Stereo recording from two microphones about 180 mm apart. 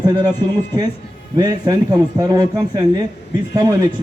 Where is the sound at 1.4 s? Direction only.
20° right (ahead or behind).